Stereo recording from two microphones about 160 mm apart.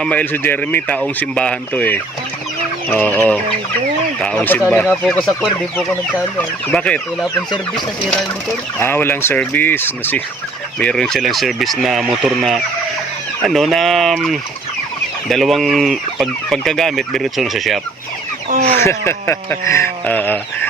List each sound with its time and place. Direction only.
0.0 s speech: 10° left (ahead or behind)
5.7 s speech: 10° left (ahead or behind)
8.8 s speech: 15° left (ahead or behind)
18.5 s speech: 55° right (ahead or behind)
18.8 s speech: 15° left (ahead or behind)